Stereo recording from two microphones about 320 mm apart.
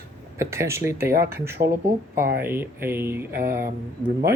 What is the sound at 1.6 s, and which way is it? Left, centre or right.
Speech, right.